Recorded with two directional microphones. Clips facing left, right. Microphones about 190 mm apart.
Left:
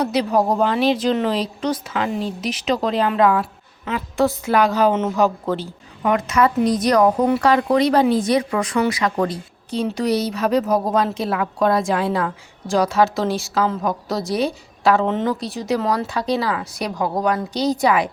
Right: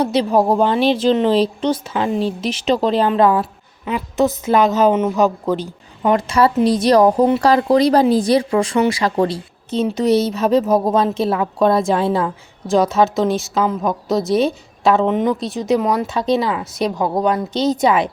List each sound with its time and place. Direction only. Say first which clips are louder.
0.0 s speech: right 3 dB; 30° right (ahead or behind)
3.8 s speech: right 2 dB; 20° right (ahead or behind)
6.1 s speech: right 3 dB; 30° right (ahead or behind)